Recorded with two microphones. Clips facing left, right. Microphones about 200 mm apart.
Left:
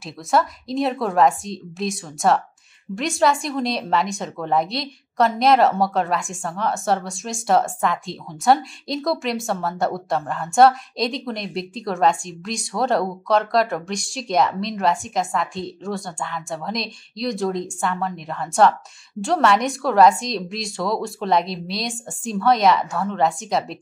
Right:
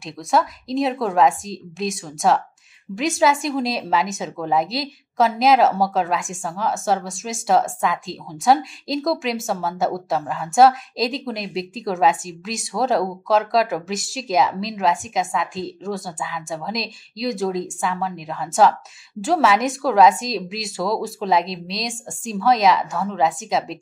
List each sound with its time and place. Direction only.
0.0 s speech: centre (ahead or behind)